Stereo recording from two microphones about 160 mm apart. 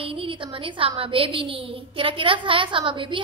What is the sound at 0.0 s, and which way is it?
A woman's voice, 35° right (ahead or behind).